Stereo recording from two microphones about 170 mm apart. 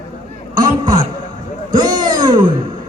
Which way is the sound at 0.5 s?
25° right (ahead or behind).